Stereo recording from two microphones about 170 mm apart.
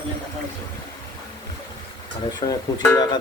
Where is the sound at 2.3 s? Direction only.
25° left (ahead or behind).